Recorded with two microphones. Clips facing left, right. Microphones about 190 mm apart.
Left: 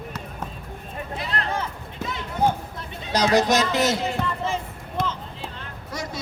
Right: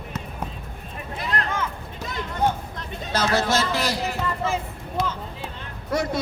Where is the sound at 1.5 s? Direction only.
35° left (ahead or behind).